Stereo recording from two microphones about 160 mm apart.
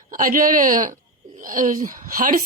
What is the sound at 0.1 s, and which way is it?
A woman's voice, 60° right (ahead or behind).